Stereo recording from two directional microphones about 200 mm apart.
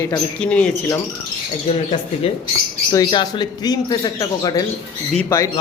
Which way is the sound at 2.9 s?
20° left (ahead or behind).